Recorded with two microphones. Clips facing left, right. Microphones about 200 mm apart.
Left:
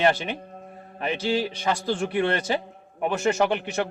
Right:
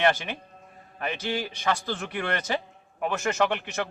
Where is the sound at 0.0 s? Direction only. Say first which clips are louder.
Left 2 dB; 30° left (ahead or behind).